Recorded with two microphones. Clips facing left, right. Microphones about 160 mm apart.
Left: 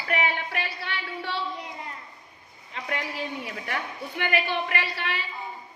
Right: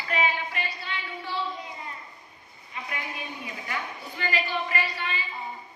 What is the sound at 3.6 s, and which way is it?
A woman's voice, 60° left (ahead or behind).